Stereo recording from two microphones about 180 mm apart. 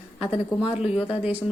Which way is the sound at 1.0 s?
35° left (ahead or behind).